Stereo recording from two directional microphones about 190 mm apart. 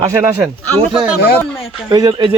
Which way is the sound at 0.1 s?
15° right (ahead or behind).